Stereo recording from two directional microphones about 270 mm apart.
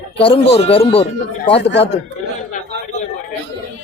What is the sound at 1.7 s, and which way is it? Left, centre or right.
Speech, left.